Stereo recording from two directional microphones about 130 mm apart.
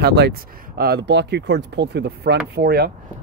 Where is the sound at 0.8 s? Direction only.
90° right.